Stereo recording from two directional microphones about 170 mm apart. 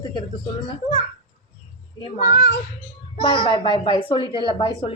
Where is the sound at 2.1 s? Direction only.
90° left.